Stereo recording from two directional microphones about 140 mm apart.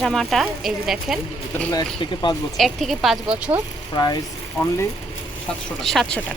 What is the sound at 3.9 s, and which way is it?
Speech, 30° left (ahead or behind).